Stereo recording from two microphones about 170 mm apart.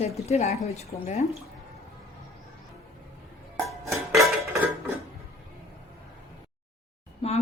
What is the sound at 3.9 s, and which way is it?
Dishes, centre (ahead or behind).